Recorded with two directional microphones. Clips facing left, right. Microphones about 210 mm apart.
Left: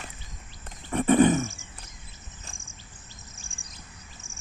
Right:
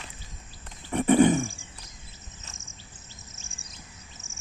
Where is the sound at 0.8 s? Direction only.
15° right (ahead or behind).